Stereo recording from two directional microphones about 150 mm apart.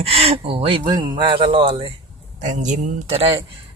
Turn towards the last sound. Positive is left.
turn(degrees=-40)  # may be behind; listen again after turning